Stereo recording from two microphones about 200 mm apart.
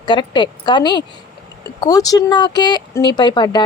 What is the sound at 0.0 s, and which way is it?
Speech, 20° left (ahead or behind).